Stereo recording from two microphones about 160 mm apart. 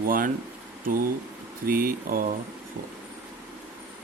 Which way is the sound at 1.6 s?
65° right (ahead or behind).